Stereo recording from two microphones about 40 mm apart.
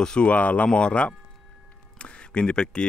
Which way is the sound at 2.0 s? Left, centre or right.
Left.